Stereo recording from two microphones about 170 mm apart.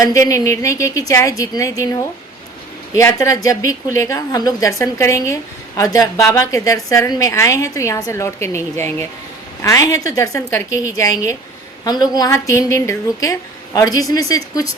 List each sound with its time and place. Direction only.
0.0 s a woman's voice: 20° left (ahead or behind)